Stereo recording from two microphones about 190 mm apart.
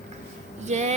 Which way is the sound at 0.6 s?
35° right (ahead or behind).